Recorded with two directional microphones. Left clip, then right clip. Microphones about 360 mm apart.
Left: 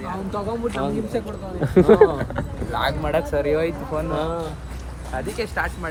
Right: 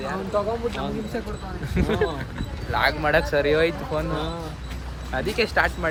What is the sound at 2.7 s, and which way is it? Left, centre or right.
Speech, right.